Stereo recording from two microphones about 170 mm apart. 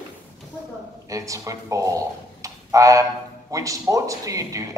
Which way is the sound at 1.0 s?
20° right (ahead or behind).